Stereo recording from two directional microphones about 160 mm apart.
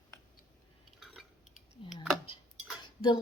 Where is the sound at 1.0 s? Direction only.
Centre (ahead or behind).